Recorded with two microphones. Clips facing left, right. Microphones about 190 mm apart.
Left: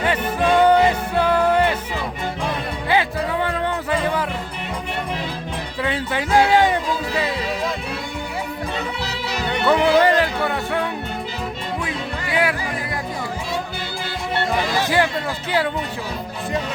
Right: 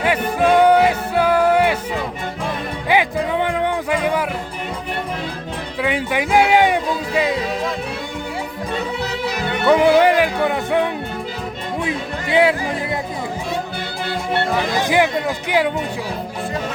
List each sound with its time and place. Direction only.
0.0 s music: 10° right (ahead or behind)
2.9 s music: 15° right (ahead or behind)
5.8 s music: 15° right (ahead or behind)
9.6 s music: 15° right (ahead or behind)
12.3 s music: 25° right (ahead or behind)
14.8 s speech: 15° right (ahead or behind)